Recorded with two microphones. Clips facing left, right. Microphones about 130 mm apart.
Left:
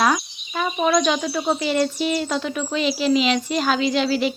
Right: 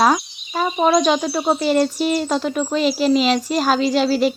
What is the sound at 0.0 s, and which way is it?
Speech, 35° right (ahead or behind).